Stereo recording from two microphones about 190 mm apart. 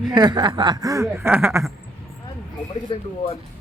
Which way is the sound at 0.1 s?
20° right (ahead or behind).